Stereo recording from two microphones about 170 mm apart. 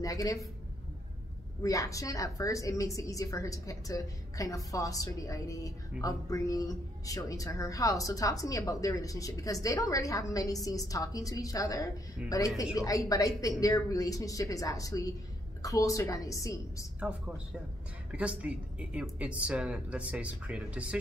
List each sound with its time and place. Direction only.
0.0 s a woman's voice: 20° left (ahead or behind)
1.6 s a woman's voice: 20° left (ahead or behind)
18.1 s a woman's voice: 5° right (ahead or behind)